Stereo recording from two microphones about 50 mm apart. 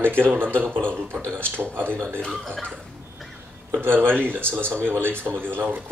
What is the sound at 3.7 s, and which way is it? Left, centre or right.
Speech, right.